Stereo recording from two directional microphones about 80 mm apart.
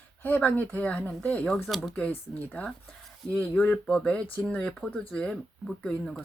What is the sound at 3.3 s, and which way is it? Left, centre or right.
Speech, centre.